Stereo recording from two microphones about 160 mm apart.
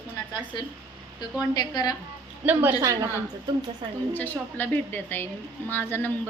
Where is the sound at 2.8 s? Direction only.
20° right (ahead or behind).